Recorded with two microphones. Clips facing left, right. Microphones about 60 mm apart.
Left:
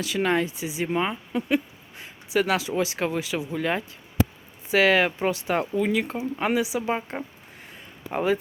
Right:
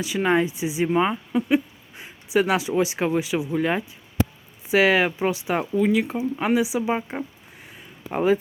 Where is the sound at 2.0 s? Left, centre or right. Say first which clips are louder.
Right 3 dB; centre.